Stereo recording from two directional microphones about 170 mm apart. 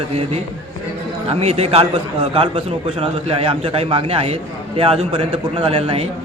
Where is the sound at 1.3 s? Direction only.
35° right (ahead or behind).